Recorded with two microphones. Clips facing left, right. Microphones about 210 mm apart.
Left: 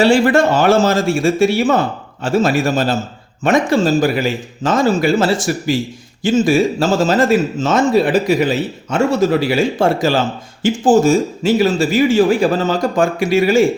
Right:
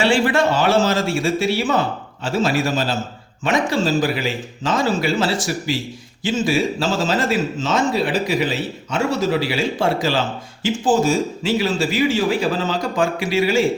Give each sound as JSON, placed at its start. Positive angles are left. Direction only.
{"t": 0.0, "sound": "speech", "side_deg": 45}